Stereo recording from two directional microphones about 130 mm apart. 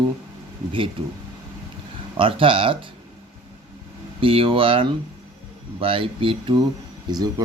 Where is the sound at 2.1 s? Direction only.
45° right (ahead or behind).